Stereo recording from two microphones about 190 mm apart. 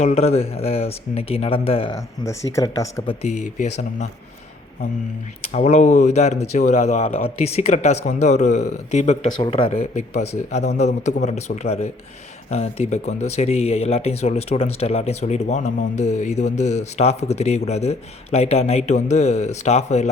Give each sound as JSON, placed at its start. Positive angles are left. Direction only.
{"t": 0.0, "sound": "speech", "side_deg": 35}
{"t": 2.2, "sound": "speech", "side_deg": 15}
{"t": 3.2, "sound": "speech", "side_deg": 40}
{"t": 5.5, "sound": "speech", "side_deg": 35}